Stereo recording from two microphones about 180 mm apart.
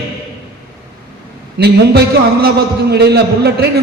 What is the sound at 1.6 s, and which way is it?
A man's voice, 65° right (ahead or behind).